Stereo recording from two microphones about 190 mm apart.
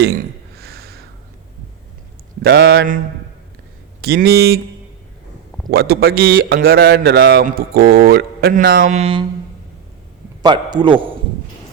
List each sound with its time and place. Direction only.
0.0 s a sound: 55° right (ahead or behind)
2.4 s speech: 55° right (ahead or behind)
4.0 s speech: 55° right (ahead or behind)
5.7 s a man's voice: 55° right (ahead or behind); by 9.2 s 35° right (ahead or behind)
10.4 s a man's voice: 25° right (ahead or behind)